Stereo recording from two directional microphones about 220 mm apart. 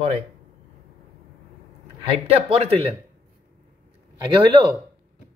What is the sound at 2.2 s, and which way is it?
Speech, 25° right (ahead or behind).